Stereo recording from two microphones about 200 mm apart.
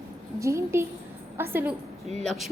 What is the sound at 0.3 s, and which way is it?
A woman's voice, 15° right (ahead or behind).